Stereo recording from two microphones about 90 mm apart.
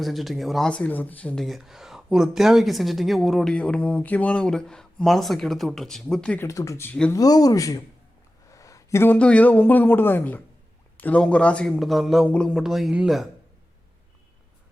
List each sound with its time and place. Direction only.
0.0 s speech: centre (ahead or behind)
0.7 s a man's voice: 15° left (ahead or behind)
1.4 s speech: centre (ahead or behind)
6.5 s speech: 35° left (ahead or behind)
8.4 s a sound: 40° left (ahead or behind)
9.0 s a woman's voice: 15° left (ahead or behind)
11.8 s speech: centre (ahead or behind)
12.3 s a man's voice: 15° left (ahead or behind)
12.5 s speech: centre (ahead or behind)